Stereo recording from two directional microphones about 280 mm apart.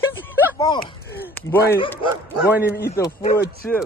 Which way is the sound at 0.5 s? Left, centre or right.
Centre.